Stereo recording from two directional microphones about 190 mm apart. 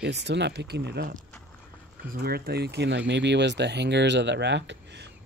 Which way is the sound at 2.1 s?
55° right (ahead or behind).